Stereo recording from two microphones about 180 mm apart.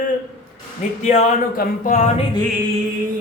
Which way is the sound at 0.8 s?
45° left (ahead or behind).